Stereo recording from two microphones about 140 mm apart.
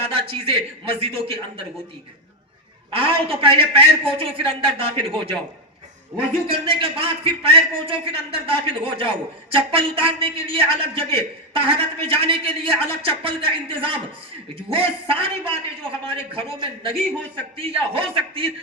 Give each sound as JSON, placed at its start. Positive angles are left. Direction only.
{"t": 0.1, "sound": "a man's voice", "side_deg": -40}
{"t": 2.9, "sound": "a man's voice", "side_deg": -40}
{"t": 6.5, "sound": "a man's voice", "side_deg": -40}